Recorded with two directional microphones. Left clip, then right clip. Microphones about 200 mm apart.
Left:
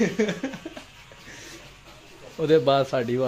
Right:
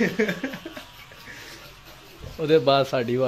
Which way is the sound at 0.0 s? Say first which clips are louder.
Right 1 dB; 15° left (ahead or behind).